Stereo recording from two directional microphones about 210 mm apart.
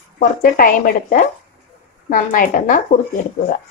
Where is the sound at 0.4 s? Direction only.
45° left (ahead or behind).